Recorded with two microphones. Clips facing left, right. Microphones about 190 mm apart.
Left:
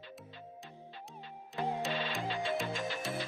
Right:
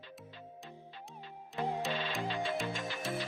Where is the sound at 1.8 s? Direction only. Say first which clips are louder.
Even; centre (ahead or behind).